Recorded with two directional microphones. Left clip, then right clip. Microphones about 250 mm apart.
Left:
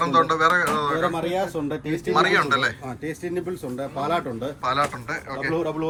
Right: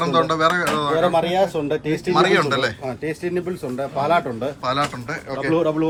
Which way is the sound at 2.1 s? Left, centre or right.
Centre.